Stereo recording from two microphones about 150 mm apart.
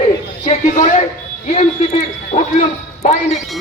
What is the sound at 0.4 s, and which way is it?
A man's voice, 50° left (ahead or behind).